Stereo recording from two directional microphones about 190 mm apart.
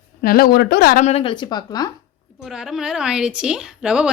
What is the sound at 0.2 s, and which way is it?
Speech, 50° left (ahead or behind).